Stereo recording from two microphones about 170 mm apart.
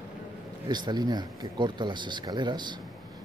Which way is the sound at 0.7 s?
25° right (ahead or behind).